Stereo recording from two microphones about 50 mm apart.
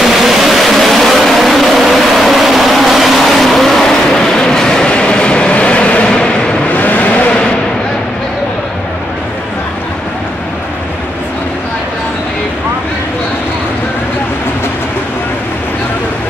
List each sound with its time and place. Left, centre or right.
0.1 s vehicle: centre
6.7 s vehicle: left